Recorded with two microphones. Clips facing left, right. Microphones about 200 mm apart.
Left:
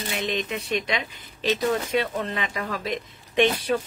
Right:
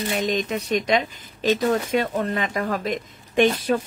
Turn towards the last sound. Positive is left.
turn(degrees=-45)  # may be behind; listen again after turning